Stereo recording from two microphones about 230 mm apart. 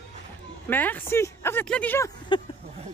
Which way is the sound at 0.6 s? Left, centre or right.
Centre.